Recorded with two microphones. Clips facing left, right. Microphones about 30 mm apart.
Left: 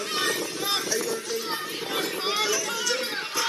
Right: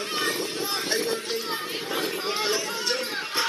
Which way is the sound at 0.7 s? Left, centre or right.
Right.